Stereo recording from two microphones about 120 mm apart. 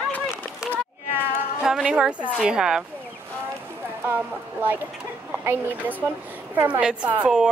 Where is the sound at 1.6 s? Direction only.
5° right (ahead or behind).